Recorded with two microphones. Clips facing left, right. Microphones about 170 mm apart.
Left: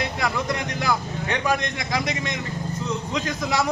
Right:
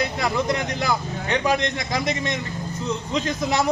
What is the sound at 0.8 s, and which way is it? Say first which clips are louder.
A man's voice: even; 25° right (ahead or behind).